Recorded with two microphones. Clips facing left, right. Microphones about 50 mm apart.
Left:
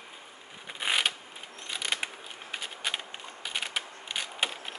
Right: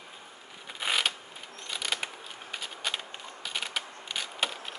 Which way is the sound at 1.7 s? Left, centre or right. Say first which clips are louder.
Left 1 dB; centre.